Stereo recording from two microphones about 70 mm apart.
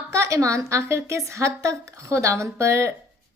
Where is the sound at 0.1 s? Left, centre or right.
Right.